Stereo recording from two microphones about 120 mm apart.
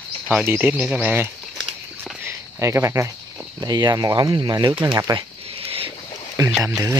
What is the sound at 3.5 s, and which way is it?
Speech, 35° right (ahead or behind).